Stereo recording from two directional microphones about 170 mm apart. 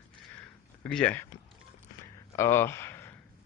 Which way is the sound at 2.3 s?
15° left (ahead or behind).